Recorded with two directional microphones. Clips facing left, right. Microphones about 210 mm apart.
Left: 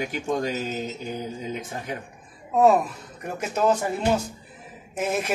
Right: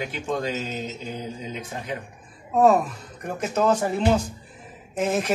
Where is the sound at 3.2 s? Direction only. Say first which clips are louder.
Right 1 dB; 10° left (ahead or behind).